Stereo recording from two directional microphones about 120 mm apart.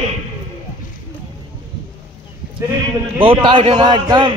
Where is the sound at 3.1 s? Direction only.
45° right (ahead or behind).